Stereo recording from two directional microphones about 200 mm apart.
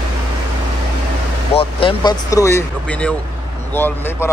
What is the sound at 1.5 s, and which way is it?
Speech, 25° left (ahead or behind).